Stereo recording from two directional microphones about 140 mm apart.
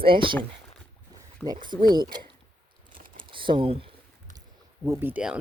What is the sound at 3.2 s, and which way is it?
Typing, 35° right (ahead or behind).